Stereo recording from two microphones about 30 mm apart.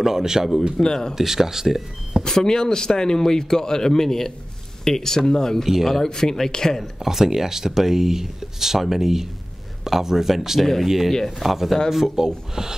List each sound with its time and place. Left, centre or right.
0.0 s speech: centre
0.7 s speech: centre
1.1 s speech: centre
2.2 s speech: left
6.8 s speech: centre
10.6 s speech: centre
12.2 s speech: centre